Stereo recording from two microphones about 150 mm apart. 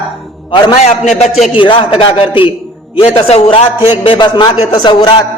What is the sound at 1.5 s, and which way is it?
A man's voice, 35° left (ahead or behind).